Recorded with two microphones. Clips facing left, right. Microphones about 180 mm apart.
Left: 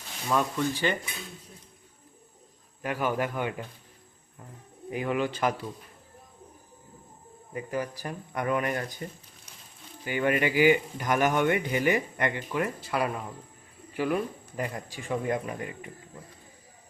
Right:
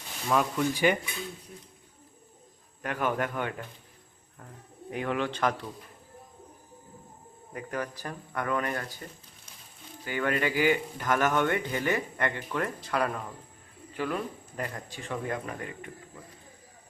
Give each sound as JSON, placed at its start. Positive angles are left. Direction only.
{"t": 0.3, "sound": "speech", "side_deg": -5}
{"t": 2.8, "sound": "speech", "side_deg": 10}
{"t": 4.9, "sound": "speech", "side_deg": 5}
{"t": 7.5, "sound": "speech", "side_deg": 10}